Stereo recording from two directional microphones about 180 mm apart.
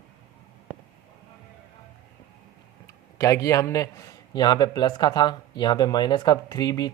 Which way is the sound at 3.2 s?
20° left (ahead or behind).